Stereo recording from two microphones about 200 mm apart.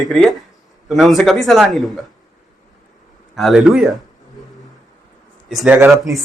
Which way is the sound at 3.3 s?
Centre (ahead or behind).